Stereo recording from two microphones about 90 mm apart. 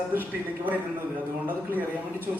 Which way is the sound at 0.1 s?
20° right (ahead or behind).